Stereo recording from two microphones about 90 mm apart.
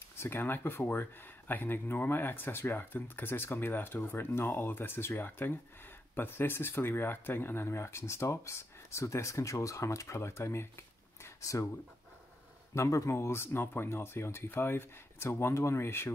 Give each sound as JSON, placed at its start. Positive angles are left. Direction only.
{"t": 0.2, "sound": "speech", "side_deg": 25}
{"t": 11.2, "sound": "a sound", "side_deg": 35}
{"t": 12.7, "sound": "speech", "side_deg": 35}